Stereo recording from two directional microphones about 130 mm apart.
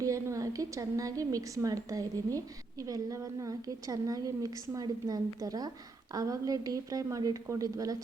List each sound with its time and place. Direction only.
0.0 s a woman's voice: 25° right (ahead or behind)